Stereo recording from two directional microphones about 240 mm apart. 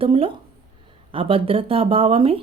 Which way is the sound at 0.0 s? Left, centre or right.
Right.